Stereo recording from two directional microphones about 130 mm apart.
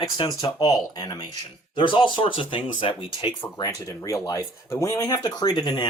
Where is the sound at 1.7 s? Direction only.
40° left (ahead or behind).